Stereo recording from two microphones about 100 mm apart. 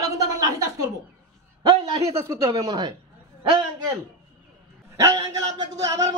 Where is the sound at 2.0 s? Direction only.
30° right (ahead or behind).